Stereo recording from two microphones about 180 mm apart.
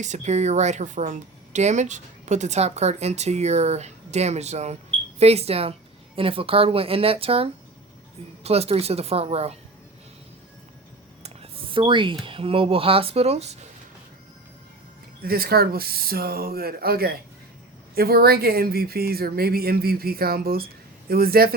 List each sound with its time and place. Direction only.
0.0 s a woman's voice: 40° right (ahead or behind)
11.2 s speech: 30° right (ahead or behind)
15.2 s speech: 55° right (ahead or behind)